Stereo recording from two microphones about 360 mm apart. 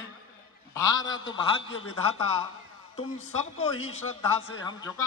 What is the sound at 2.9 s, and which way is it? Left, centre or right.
A man's voice, centre.